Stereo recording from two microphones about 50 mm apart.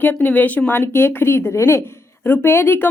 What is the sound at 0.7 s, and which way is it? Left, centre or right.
Speech, left.